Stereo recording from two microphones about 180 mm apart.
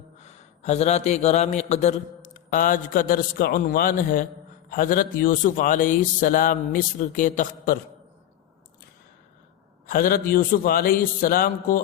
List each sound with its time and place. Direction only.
0.2 s a man's voice: 40° left (ahead or behind)
9.9 s a man's voice: 55° left (ahead or behind)